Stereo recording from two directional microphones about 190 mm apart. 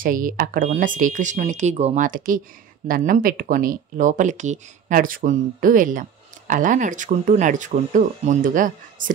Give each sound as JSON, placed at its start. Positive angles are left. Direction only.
{"t": 0.0, "sound": "speech", "side_deg": -45}